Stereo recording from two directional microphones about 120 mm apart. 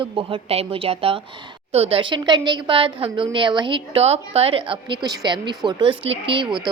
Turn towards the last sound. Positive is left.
turn(degrees=-45)  # may be behind; listen again after turning